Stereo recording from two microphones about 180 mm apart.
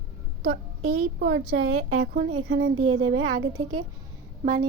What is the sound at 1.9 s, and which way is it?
Speech, 45° right (ahead or behind).